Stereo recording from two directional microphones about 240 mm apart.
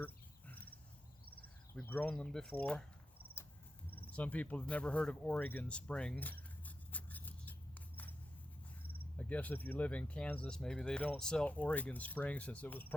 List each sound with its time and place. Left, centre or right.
0.0 s a sound: centre
1.7 s speech: centre
3.8 s speech: centre
9.1 s speech: centre